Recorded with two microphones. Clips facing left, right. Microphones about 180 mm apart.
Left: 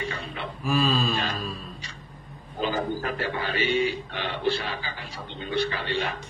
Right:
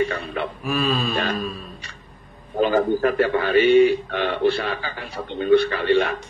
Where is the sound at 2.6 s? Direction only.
55° right (ahead or behind).